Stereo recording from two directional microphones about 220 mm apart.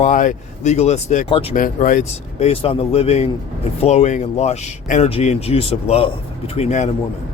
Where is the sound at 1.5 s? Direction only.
40° left (ahead or behind).